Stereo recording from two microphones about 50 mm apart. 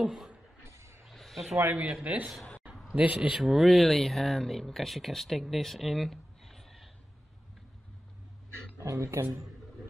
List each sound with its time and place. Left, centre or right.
0.0 s speech: centre
0.7 s music: right
1.0 s a sound: centre
2.0 s a man's voice: right
3.3 s speech: centre
8.7 s speech: right